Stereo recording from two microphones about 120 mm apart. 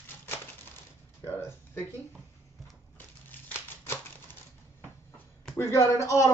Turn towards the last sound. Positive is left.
turn(degrees=25)  # may be behind; listen again after turning